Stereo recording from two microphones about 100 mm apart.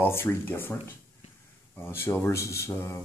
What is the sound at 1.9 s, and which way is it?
Speech, 25° left (ahead or behind).